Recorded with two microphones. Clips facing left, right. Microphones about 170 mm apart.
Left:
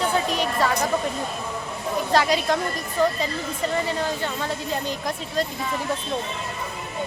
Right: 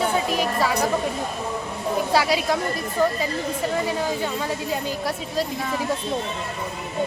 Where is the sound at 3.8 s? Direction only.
10° right (ahead or behind).